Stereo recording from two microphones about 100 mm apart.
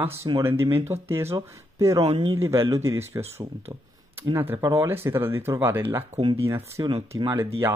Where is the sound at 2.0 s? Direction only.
70° right (ahead or behind).